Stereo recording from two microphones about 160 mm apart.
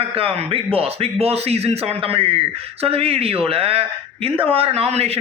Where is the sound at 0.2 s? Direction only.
35° right (ahead or behind).